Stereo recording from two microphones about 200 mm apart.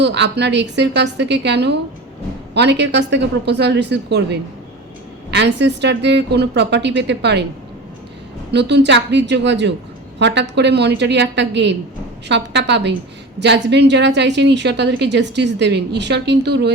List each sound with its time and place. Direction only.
0.0 s a woman's voice: 60° right (ahead or behind)
8.5 s a woman's voice: 60° right (ahead or behind)